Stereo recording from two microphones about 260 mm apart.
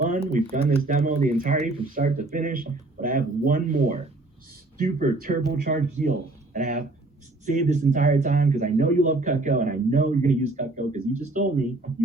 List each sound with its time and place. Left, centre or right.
0.5 s speech: right